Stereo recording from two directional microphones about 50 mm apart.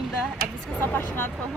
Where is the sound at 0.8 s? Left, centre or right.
Left.